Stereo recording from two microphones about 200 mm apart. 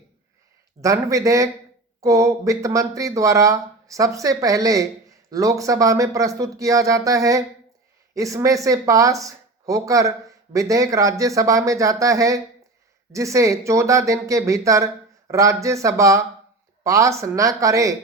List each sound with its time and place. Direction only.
0.8 s speech: 15° right (ahead or behind)